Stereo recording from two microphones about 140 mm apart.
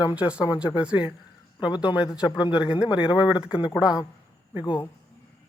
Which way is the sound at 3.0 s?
30° left (ahead or behind).